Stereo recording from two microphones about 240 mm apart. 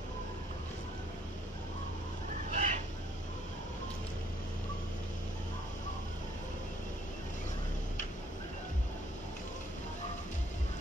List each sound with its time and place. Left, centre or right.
2.5 s chicken: right